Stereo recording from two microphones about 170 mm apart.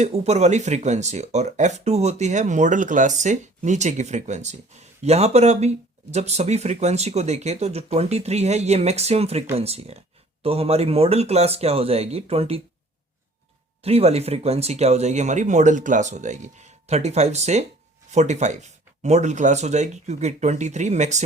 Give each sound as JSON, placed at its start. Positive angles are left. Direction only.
{"t": 0.0, "sound": "speech", "side_deg": -40}
{"t": 13.8, "sound": "speech", "side_deg": -35}